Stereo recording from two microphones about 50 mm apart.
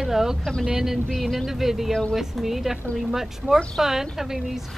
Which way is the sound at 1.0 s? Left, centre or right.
Centre.